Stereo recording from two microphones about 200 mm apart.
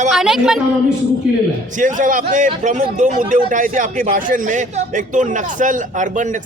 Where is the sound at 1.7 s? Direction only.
40° right (ahead or behind).